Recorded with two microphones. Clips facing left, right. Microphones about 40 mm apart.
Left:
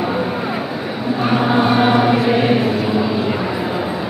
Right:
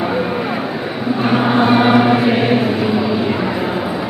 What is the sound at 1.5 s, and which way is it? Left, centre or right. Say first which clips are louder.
Gong: right 2 dB; centre.